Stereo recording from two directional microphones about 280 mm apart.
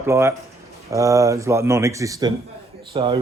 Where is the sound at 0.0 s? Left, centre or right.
Centre.